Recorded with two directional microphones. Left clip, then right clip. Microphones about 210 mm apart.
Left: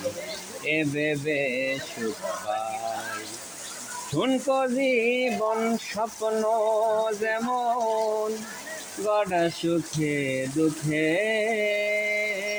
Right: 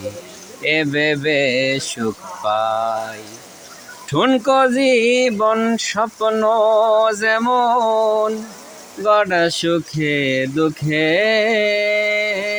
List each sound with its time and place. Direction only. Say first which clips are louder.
0.6 s speech: right 9 dB; 55° right (ahead or behind)
4.2 s speech: right 10 dB; 55° right (ahead or behind)
10.8 s music: right 9 dB; 55° right (ahead or behind)